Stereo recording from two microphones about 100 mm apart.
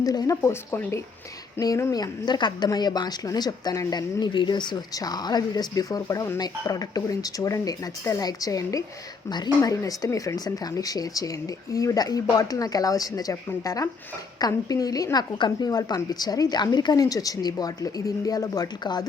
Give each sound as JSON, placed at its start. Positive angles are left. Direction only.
{"t": 0.0, "sound": "a woman's voice", "side_deg": 40}